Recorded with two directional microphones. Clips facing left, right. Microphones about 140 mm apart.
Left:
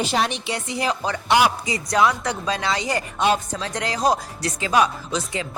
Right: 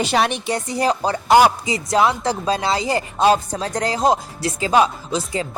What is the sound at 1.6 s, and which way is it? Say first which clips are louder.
Music: right 2 dB; 25° right (ahead or behind).